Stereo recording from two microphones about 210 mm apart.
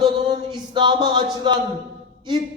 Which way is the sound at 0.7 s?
20° right (ahead or behind).